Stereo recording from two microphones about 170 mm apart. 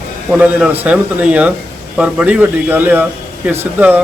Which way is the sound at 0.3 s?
5° right (ahead or behind).